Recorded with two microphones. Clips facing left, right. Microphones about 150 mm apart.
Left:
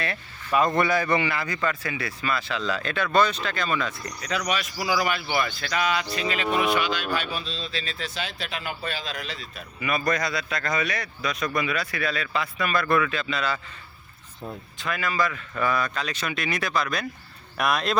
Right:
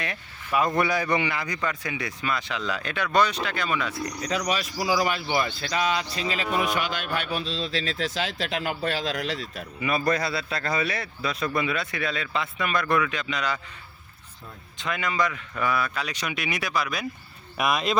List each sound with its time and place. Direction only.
0.0 s a man's voice: 10° right (ahead or behind)
4.2 s speech: 35° right (ahead or behind); by 9.6 s 85° right
9.8 s a man's voice: 30° right (ahead or behind)
14.8 s a man's voice: 20° right (ahead or behind)
15.5 s a man's voice: 10° right (ahead or behind)